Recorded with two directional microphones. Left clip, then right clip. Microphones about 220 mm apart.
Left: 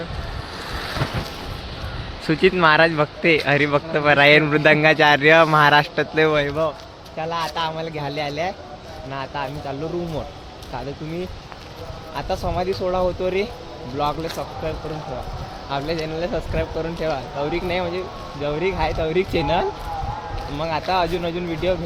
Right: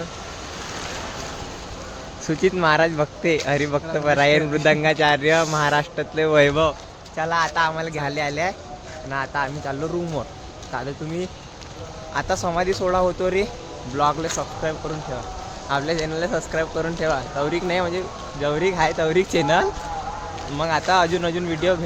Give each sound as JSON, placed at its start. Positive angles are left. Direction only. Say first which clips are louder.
{"t": 2.2, "sound": "speech", "louder": "left 3 dB", "side_deg": 10}
{"t": 6.4, "sound": "speech", "louder": "right 5 dB", "side_deg": -50}
{"t": 7.2, "sound": "speech", "louder": "right 4 dB", "side_deg": -5}
{"t": 12.1, "sound": "speech", "louder": "right 2 dB", "side_deg": -10}
{"t": 15.7, "sound": "speech", "louder": "right 2 dB", "side_deg": -5}